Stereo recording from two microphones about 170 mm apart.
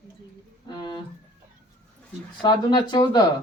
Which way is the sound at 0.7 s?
25° left (ahead or behind).